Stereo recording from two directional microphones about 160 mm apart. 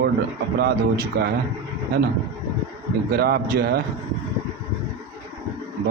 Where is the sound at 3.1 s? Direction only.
75° right (ahead or behind).